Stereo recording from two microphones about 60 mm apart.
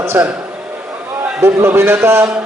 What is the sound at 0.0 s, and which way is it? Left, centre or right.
Speech, right.